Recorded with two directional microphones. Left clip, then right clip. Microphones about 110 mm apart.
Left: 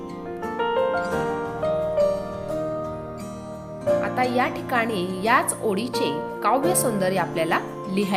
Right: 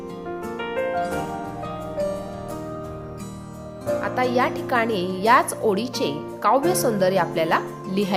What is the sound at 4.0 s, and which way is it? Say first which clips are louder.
Speech: right 1 dB; 30° right (ahead or behind).